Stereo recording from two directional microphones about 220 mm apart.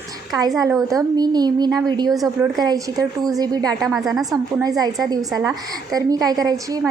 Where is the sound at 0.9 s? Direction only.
20° right (ahead or behind).